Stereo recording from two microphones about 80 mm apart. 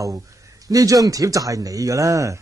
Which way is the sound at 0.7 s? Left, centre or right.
Right.